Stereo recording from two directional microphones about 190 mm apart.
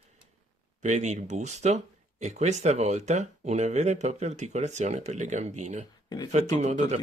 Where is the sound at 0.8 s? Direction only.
40° right (ahead or behind).